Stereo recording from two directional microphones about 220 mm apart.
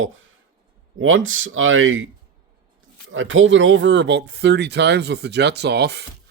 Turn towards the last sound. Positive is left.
turn(degrees=-50)  # may be behind; listen again after turning